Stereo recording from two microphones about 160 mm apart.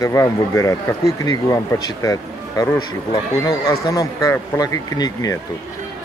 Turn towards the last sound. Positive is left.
turn(degrees=20)  # may be behind; listen again after turning